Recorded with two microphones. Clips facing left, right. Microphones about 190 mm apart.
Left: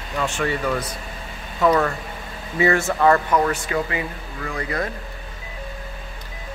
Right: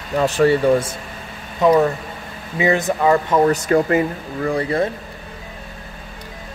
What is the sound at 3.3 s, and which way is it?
Speech, 35° right (ahead or behind).